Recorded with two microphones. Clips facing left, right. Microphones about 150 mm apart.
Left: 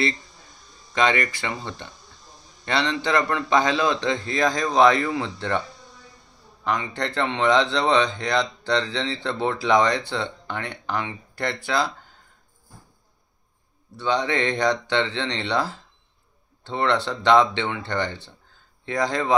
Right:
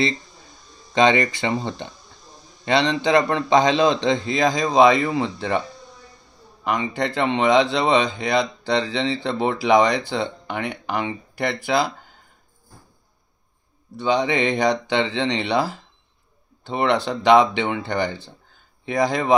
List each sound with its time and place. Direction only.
0.9 s speech: 20° right (ahead or behind)
2.6 s speech: 15° right (ahead or behind)
6.6 s speech: 15° right (ahead or behind)
13.9 s speech: 15° right (ahead or behind)